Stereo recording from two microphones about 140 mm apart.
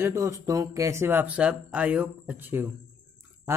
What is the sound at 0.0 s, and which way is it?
Speech, 20° right (ahead or behind).